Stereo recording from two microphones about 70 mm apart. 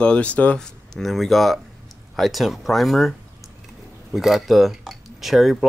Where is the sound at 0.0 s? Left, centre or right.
Centre.